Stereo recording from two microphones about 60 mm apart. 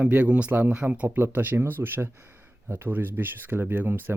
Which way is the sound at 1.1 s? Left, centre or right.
Right.